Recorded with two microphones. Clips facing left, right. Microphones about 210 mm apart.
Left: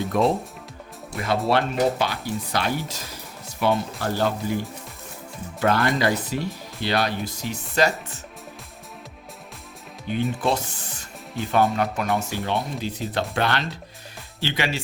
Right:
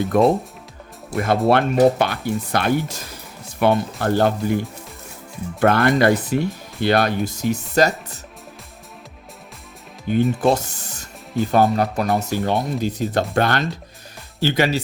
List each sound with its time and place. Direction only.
0.1 s speech: 55° right (ahead or behind)
5.5 s speech: 55° right (ahead or behind)
10.4 s speech: 45° right (ahead or behind)